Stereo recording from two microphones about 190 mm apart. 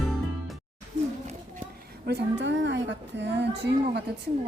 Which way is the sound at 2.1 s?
65° right (ahead or behind).